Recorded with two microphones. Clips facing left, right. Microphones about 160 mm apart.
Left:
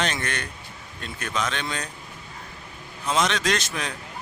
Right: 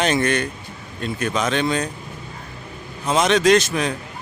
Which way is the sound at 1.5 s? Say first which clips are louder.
Right 10 dB; 10° right (ahead or behind).